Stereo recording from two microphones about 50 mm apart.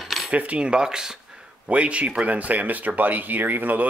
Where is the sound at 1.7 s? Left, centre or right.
Right.